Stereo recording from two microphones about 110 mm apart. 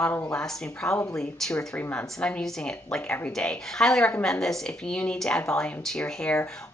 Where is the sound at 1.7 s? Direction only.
15° left (ahead or behind).